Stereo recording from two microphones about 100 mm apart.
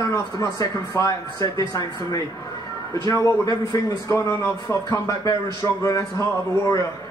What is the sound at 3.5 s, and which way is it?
A man's voice, 35° left (ahead or behind).